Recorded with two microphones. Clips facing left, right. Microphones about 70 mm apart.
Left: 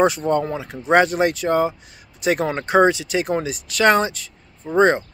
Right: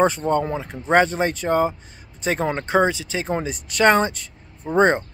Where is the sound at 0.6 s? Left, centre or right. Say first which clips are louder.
Left 3 dB; centre.